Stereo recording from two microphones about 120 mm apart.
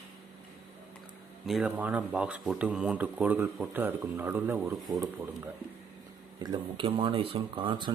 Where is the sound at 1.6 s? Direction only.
15° right (ahead or behind).